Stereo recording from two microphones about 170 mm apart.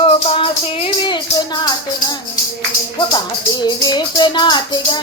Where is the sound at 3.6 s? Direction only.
25° left (ahead or behind).